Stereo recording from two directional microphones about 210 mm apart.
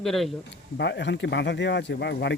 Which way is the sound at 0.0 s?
Centre (ahead or behind).